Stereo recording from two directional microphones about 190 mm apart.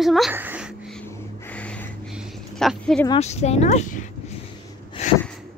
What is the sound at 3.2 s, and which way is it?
Speech, 35° left (ahead or behind).